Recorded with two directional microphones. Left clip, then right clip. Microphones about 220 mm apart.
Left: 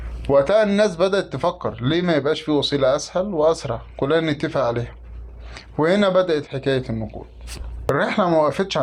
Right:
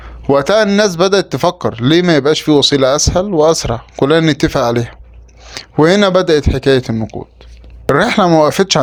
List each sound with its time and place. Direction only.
0.3 s speech: 45° right (ahead or behind)